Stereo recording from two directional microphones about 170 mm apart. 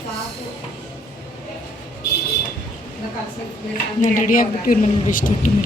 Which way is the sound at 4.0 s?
50° left (ahead or behind).